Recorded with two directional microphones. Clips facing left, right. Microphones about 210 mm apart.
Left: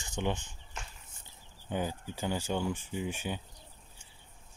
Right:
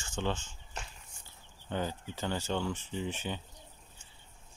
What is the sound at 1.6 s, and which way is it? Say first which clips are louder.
Speech: left 1 dB; 10° left (ahead or behind).